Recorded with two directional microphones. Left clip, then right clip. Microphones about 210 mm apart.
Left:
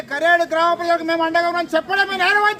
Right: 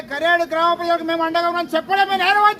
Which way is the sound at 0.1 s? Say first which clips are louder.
Left 2 dB; 5° left (ahead or behind).